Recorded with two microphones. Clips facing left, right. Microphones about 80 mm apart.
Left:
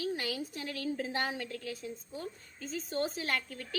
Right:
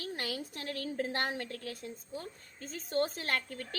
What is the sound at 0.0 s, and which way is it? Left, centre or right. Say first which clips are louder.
A woman's voice: left 3 dB; right.